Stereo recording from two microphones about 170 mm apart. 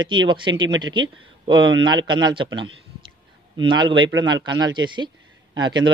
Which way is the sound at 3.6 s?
30° right (ahead or behind).